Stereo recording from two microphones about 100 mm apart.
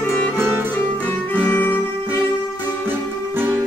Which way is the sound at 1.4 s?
20° left (ahead or behind).